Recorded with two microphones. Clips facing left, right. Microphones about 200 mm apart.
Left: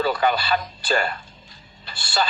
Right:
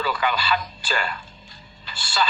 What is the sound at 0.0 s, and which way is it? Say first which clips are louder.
Speech: left 4 dB; 40° left (ahead or behind).